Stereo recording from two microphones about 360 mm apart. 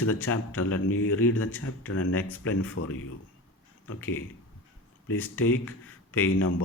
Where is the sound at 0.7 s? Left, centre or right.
Left.